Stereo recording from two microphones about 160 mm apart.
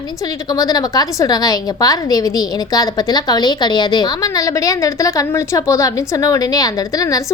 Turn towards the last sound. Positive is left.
turn(degrees=20)  # may be behind; listen again after turning